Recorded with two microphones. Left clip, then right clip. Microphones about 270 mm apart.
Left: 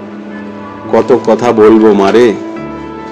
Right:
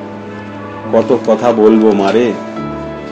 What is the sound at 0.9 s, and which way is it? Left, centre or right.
A man's voice, left.